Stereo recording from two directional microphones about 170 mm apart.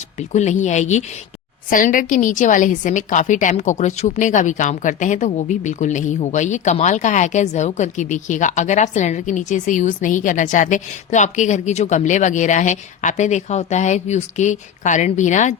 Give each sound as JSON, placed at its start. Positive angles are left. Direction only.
{"t": 0.2, "sound": "a woman's voice", "side_deg": 45}